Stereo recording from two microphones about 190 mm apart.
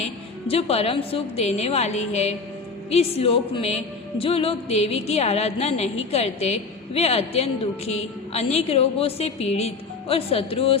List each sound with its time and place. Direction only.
0.0 s a woman's voice: 30° left (ahead or behind)